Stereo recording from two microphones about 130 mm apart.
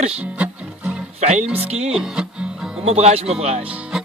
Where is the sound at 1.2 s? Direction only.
60° right (ahead or behind).